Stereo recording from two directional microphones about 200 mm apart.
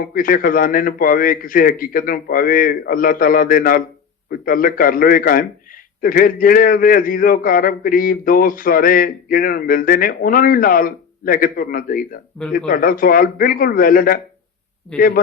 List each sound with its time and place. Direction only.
0.0 s a man's voice: 45° left (ahead or behind)